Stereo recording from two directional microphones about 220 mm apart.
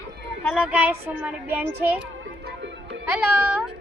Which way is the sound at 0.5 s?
5° right (ahead or behind).